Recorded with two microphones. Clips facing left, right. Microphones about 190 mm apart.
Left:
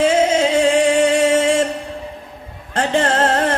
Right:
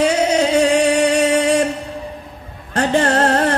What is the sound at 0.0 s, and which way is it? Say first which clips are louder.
Music: left 1 dB; 40° right (ahead or behind).